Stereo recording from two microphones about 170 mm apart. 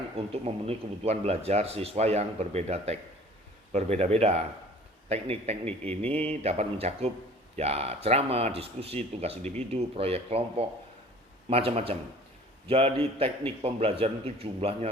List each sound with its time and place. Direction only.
0.4 s speech: 35° right (ahead or behind)